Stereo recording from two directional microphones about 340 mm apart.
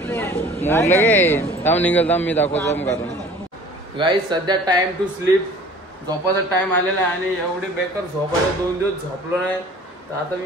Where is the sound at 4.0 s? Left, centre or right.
Centre.